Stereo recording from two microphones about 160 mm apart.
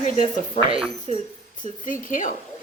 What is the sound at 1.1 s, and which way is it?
Speech, 45° left (ahead or behind).